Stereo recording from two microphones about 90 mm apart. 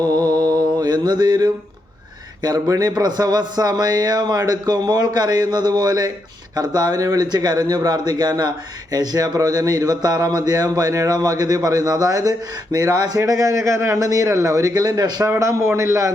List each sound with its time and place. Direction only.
0.0 s mantra: 45° right (ahead or behind)
2.4 s a man's voice: 40° right (ahead or behind)
15.3 s a man's voice: 35° right (ahead or behind)